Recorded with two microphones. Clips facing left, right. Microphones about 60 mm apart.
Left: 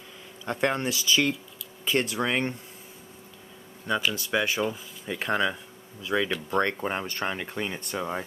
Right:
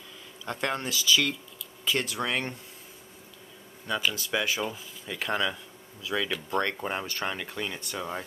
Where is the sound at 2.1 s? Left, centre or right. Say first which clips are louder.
Left 3 dB; centre.